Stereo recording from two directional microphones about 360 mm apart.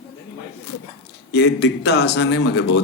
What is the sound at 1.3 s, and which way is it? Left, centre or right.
Speech, left.